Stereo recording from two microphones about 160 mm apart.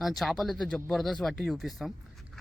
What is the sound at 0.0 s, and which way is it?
Speech, centre (ahead or behind).